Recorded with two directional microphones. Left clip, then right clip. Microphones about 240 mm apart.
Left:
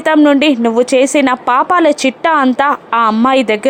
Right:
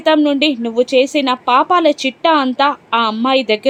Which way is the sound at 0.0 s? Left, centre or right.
Left.